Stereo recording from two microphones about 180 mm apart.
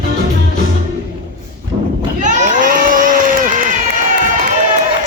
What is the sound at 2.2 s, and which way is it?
Crowd, 45° right (ahead or behind).